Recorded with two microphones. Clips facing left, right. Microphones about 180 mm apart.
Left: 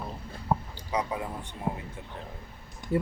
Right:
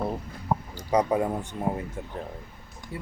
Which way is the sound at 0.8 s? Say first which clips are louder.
Right 8 dB; 45° right (ahead or behind).